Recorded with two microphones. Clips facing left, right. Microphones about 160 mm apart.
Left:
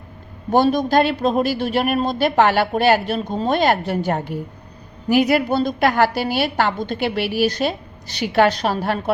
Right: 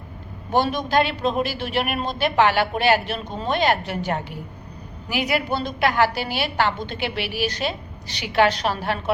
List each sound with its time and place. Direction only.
0.5 s a woman's voice: 40° left (ahead or behind)